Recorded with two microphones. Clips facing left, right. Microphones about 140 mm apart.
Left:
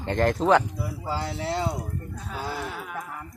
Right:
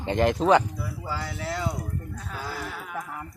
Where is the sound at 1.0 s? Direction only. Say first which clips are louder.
Left 4 dB; 25° left (ahead or behind).